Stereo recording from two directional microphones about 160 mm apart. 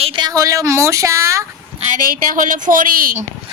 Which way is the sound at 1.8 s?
55° right (ahead or behind).